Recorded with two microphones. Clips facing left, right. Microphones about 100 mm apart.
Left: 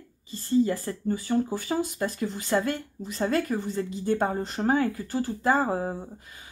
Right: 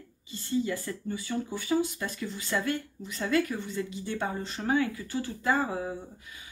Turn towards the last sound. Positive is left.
turn(degrees=40)  # may be behind; listen again after turning